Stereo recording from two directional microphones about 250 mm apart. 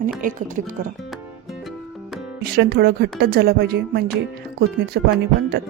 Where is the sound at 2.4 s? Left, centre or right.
Right.